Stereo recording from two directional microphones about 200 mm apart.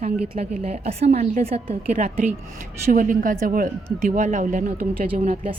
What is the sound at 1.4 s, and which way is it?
Speech, 30° right (ahead or behind).